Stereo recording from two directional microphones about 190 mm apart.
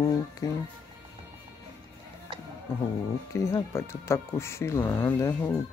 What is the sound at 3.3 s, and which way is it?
Speech, 15° left (ahead or behind).